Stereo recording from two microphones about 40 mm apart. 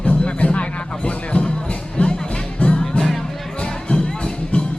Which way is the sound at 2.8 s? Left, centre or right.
Centre.